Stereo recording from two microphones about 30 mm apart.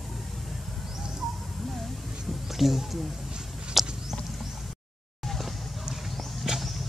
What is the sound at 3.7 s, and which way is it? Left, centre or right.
Horse, centre.